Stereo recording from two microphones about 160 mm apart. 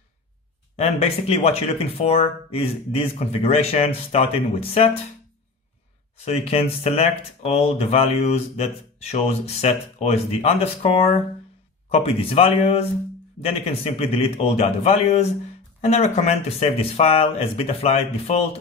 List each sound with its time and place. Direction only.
0.7 s speech: 40° left (ahead or behind)
6.1 s speech: 40° left (ahead or behind)